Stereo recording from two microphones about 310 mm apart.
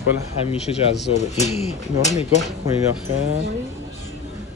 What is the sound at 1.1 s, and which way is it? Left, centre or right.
Speech, left.